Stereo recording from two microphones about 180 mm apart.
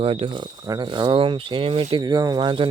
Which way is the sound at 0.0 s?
30° right (ahead or behind).